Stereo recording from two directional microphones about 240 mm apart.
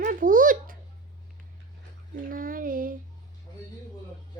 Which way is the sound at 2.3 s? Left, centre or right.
Right.